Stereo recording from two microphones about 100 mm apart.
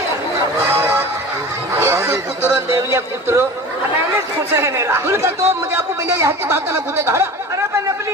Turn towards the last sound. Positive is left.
turn(degrees=-25)  # may be behind; listen again after turning